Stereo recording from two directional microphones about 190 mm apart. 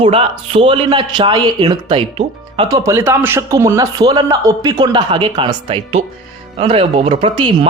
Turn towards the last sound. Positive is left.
turn(degrees=-25)  # may be behind; listen again after turning